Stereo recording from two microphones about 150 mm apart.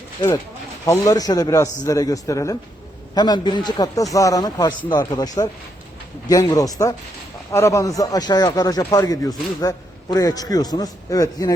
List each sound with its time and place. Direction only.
0.9 s a man's voice: 25° left (ahead or behind)